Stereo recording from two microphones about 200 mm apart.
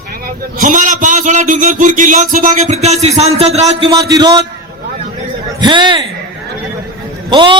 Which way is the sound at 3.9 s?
20° right (ahead or behind).